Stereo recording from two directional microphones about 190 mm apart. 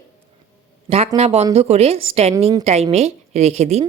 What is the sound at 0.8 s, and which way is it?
A woman's voice, 30° right (ahead or behind).